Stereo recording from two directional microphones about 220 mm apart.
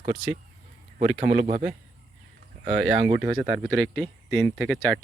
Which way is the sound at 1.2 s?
30° right (ahead or behind).